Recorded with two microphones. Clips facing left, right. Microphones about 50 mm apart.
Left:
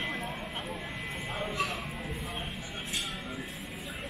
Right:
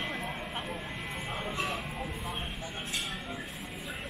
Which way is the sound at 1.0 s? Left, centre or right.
Centre.